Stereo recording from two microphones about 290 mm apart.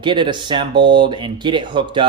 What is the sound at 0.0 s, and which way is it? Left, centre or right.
Speech, centre.